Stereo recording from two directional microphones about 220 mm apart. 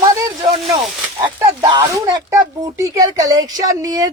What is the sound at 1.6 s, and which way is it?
Speech, 20° right (ahead or behind).